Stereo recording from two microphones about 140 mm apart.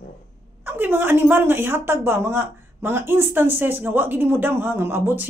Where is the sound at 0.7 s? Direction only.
15° right (ahead or behind).